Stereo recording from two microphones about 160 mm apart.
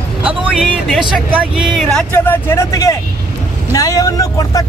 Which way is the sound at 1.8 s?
5° left (ahead or behind).